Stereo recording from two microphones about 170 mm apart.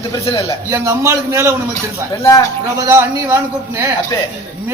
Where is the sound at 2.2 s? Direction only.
20° left (ahead or behind).